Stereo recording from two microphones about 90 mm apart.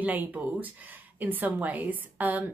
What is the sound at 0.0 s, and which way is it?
A woman's voice, 20° right (ahead or behind).